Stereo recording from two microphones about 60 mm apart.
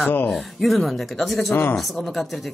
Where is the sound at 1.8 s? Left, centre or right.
Centre.